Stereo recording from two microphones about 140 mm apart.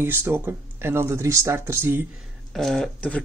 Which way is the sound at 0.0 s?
15° right (ahead or behind).